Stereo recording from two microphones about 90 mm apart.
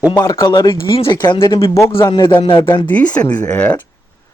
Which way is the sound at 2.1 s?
55° left (ahead or behind).